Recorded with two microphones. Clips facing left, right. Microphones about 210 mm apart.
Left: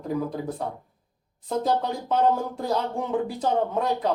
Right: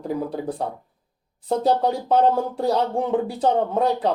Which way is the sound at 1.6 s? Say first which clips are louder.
Right 6 dB; 35° right (ahead or behind).